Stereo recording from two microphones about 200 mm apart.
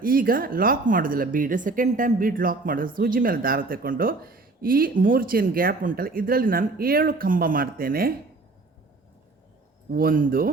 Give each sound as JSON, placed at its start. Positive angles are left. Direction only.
{"t": 0.0, "sound": "a woman's voice", "side_deg": -45}
{"t": 9.9, "sound": "a woman's voice", "side_deg": -45}